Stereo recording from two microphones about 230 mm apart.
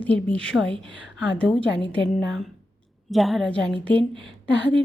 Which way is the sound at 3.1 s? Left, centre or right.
Centre.